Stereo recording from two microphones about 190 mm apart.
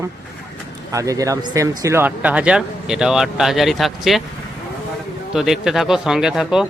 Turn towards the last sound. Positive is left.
turn(degrees=-5)  # may be behind; listen again after turning